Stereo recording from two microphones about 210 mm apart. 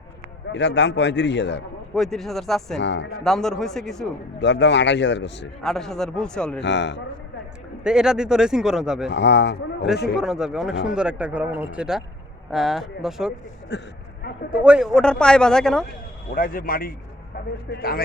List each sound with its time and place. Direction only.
0.5 s a man's voice: 55° left (ahead or behind)
2.0 s speech: centre (ahead or behind)
2.8 s a man's voice: 55° left (ahead or behind)
3.2 s speech: centre (ahead or behind)
4.4 s a man's voice: 55° left (ahead or behind)
5.6 s speech: centre (ahead or behind)
6.6 s a man's voice: 55° left (ahead or behind)
7.9 s speech: 5° right (ahead or behind)
9.0 s speech: 55° left (ahead or behind)
10.2 s speech: 5° right (ahead or behind)
13.7 s a man's voice: 55° left (ahead or behind)
14.5 s speech: 5° right (ahead or behind)
16.3 s speech: 45° left (ahead or behind)